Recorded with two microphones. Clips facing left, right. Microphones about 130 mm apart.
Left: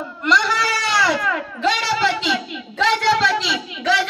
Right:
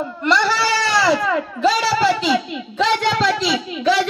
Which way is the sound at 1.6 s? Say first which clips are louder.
Right 3 dB; 35° right (ahead or behind).